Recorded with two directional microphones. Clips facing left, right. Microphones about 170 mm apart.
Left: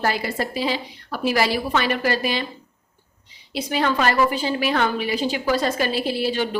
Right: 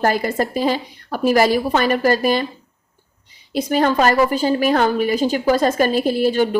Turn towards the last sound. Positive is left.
turn(degrees=-45)  # may be behind; listen again after turning